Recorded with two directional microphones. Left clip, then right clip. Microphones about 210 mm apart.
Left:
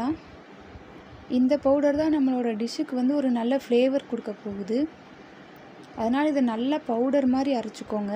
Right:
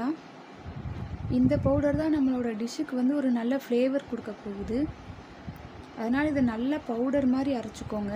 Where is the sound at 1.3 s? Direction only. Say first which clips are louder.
Left 4 dB; 15° left (ahead or behind).